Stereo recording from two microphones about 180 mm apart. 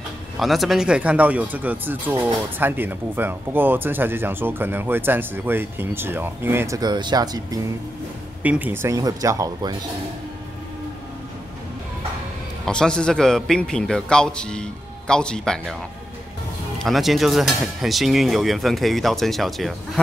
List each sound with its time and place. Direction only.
0.4 s speech: centre (ahead or behind); by 7.6 s 20° right (ahead or behind)
8.4 s speech: 10° right (ahead or behind)
12.6 s speech: 5° left (ahead or behind)
16.8 s speech: centre (ahead or behind)